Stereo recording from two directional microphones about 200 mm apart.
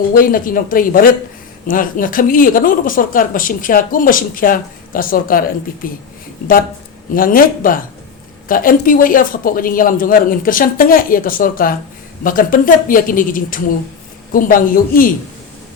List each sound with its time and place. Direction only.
0.1 s speech: 45° left (ahead or behind)
7.1 s speech: 45° left (ahead or behind)